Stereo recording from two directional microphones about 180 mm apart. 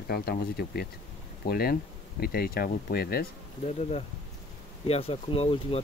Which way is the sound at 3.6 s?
35° left (ahead or behind).